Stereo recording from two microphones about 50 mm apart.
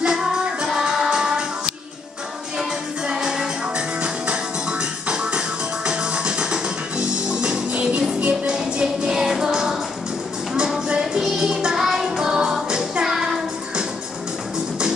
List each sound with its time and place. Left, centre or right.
0.0 s music: centre
3.1 s music: centre